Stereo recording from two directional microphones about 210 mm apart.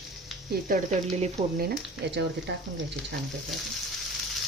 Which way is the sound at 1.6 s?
50° right (ahead or behind).